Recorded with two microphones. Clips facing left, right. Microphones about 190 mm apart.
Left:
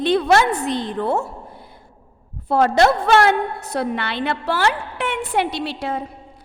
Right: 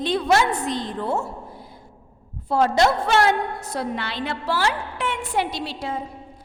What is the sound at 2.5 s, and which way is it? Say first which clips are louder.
A woman's voice: left 3 dB; 60° left (ahead or behind).